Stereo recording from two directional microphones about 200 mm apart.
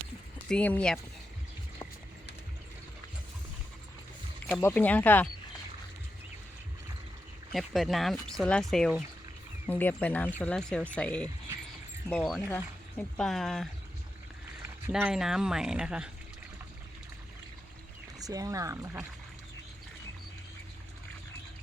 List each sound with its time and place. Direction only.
0.4 s speech: 5° left (ahead or behind)
4.6 s speech: 10° left (ahead or behind)
7.5 s speech: centre (ahead or behind)
14.8 s speech: 5° right (ahead or behind)
18.2 s speech: 15° right (ahead or behind)